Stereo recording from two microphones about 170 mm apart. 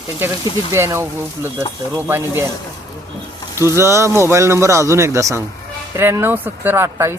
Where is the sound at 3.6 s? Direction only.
15° right (ahead or behind).